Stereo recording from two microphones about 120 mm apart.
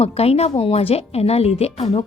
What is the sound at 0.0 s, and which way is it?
A woman's voice, 55° left (ahead or behind).